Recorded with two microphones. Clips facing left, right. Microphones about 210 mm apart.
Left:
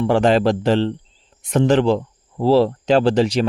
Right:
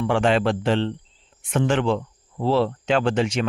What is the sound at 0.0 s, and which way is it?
Speech, 40° left (ahead or behind).